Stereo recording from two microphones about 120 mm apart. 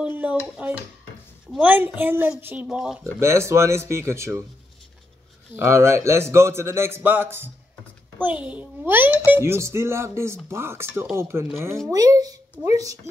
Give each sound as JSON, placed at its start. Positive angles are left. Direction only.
{"t": 0.0, "sound": "a woman's voice", "side_deg": -10}
{"t": 3.0, "sound": "a child's voice", "side_deg": -25}
{"t": 5.6, "sound": "a child's voice", "side_deg": -25}